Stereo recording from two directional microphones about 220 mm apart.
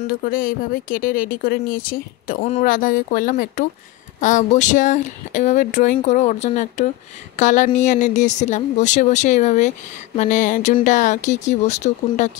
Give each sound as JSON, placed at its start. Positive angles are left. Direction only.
{"t": 0.2, "sound": "speech", "side_deg": 40}